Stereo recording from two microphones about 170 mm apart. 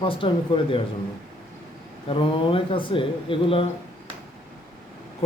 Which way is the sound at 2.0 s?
30° left (ahead or behind).